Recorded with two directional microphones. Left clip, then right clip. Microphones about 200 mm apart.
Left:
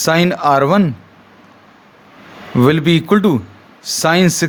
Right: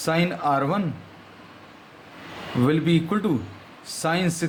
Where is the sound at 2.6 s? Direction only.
50° left (ahead or behind).